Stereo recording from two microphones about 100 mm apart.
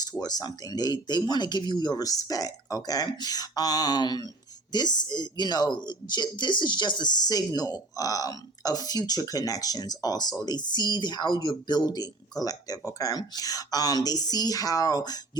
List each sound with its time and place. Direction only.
0.0 s speech: 40° left (ahead or behind)